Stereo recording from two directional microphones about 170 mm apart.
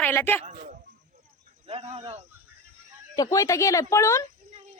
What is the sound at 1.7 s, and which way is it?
Speech, 35° right (ahead or behind).